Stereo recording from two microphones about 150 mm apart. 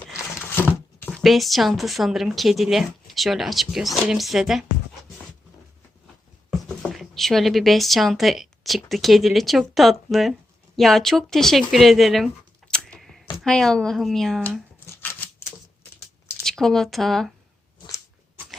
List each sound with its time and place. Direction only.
0.3 s a sound: 10° left (ahead or behind)
1.1 s a woman's voice: centre (ahead or behind)
6.7 s a woman's voice: centre (ahead or behind)
14.8 s scissors: 15° left (ahead or behind)
16.4 s speech: 5° left (ahead or behind)